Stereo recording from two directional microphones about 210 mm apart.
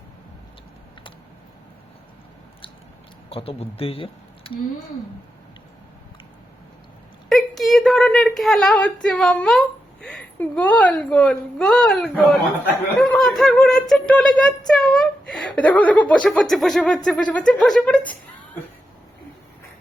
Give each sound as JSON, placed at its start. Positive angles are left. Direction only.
{"t": 3.2, "sound": "speech", "side_deg": 30}
{"t": 7.3, "sound": "a woman's voice", "side_deg": 0}